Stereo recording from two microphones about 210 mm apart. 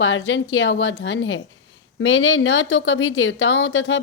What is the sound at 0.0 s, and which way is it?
A woman's voice, 65° left (ahead or behind).